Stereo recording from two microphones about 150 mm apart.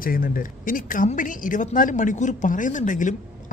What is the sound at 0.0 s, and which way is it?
A woman's voice, 70° left (ahead or behind).